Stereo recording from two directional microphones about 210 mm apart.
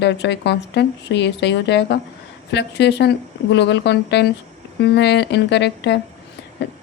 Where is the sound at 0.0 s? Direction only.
55° left (ahead or behind).